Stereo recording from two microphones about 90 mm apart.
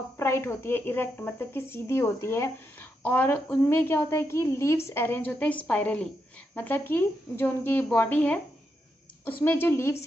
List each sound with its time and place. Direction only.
0.2 s a woman's voice: 25° left (ahead or behind)